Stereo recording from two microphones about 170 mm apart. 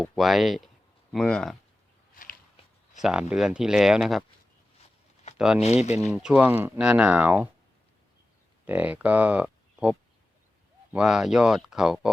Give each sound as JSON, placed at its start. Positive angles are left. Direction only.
{"t": 0.0, "sound": "speech", "side_deg": 0}
{"t": 2.6, "sound": "a sound", "side_deg": 35}
{"t": 3.0, "sound": "speech", "side_deg": -5}
{"t": 5.4, "sound": "speech", "side_deg": -5}
{"t": 5.6, "sound": "speech", "side_deg": 40}
{"t": 6.0, "sound": "speech", "side_deg": 0}
{"t": 8.6, "sound": "speech", "side_deg": -10}